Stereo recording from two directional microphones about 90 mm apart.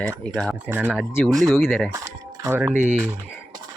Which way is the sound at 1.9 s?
35° right (ahead or behind).